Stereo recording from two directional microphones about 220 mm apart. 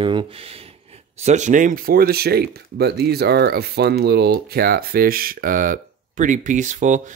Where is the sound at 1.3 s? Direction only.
35° right (ahead or behind).